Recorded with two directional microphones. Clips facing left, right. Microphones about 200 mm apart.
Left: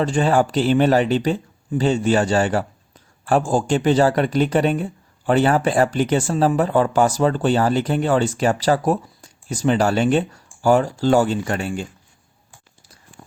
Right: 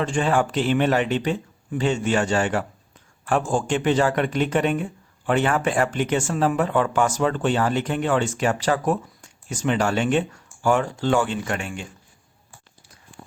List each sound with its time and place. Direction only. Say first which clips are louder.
0.0 s a man's voice: left 4 dB; 35° left (ahead or behind)